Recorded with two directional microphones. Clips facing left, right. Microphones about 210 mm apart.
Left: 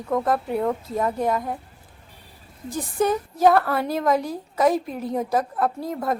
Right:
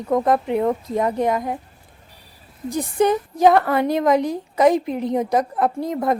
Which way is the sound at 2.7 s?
15° right (ahead or behind).